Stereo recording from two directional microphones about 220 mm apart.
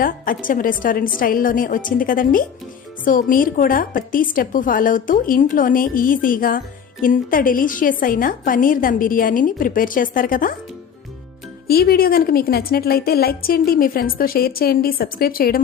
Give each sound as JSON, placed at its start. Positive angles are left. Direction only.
{"t": 0.0, "sound": "a woman's voice", "side_deg": 40}
{"t": 11.7, "sound": "a woman's voice", "side_deg": 45}